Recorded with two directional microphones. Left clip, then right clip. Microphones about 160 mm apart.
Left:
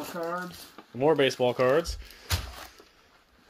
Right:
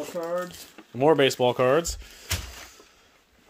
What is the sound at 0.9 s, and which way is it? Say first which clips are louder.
Speech: right 3 dB; 45° right (ahead or behind).